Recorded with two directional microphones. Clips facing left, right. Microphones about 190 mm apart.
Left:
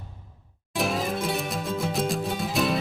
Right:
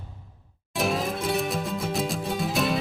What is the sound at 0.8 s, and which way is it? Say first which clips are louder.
Music: even; centre (ahead or behind).